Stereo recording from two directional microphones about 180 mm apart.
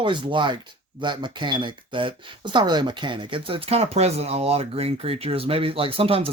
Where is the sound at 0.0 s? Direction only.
25° right (ahead or behind).